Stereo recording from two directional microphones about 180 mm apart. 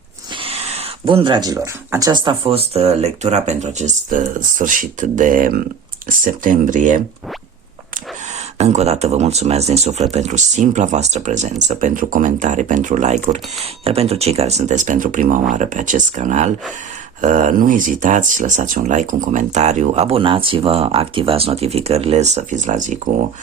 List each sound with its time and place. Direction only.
0.3 s speech: 35° right (ahead or behind)
8.5 s speech: 35° right (ahead or behind)